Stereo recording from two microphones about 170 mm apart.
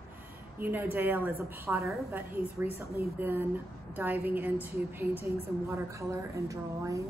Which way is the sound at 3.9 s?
10° right (ahead or behind).